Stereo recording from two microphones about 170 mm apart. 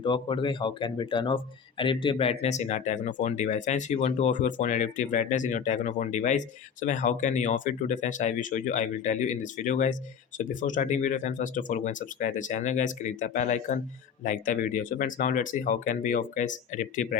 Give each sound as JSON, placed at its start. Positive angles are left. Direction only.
{"t": 0.0, "sound": "speech", "side_deg": 30}